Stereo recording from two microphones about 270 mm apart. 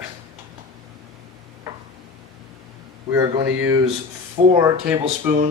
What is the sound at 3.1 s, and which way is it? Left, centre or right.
Speech, centre.